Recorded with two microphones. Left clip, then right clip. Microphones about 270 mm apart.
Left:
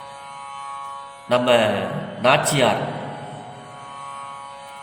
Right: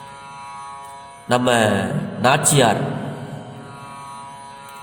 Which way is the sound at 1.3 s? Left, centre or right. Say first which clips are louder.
Even; right.